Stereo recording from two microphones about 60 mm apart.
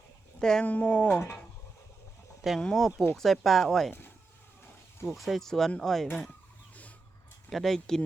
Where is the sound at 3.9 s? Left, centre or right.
Left.